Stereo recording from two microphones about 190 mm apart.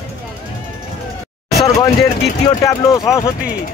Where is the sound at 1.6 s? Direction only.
20° left (ahead or behind).